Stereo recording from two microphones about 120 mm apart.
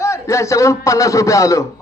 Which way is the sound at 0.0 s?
25° left (ahead or behind).